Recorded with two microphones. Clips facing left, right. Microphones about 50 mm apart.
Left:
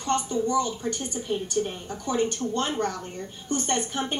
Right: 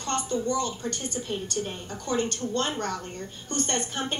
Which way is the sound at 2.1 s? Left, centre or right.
Centre.